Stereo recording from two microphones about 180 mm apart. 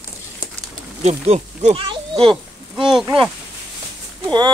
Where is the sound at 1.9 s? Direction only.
30° right (ahead or behind).